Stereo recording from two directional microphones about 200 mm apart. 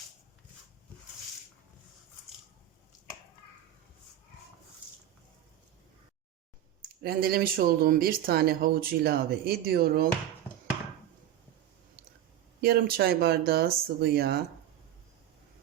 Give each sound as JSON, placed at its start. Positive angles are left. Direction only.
{"t": 7.0, "sound": "speech", "side_deg": -50}
{"t": 12.6, "sound": "speech", "side_deg": -50}